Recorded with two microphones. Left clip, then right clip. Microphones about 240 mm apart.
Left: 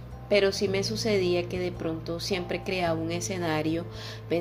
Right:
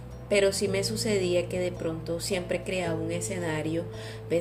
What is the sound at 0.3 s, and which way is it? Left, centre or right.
Speech, centre.